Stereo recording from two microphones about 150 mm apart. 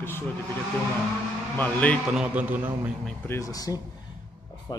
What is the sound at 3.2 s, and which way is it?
Speech, 20° left (ahead or behind).